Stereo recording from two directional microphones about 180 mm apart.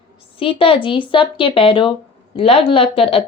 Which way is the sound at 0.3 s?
30° left (ahead or behind).